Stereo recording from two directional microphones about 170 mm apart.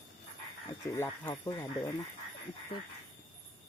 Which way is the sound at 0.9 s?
15° left (ahead or behind).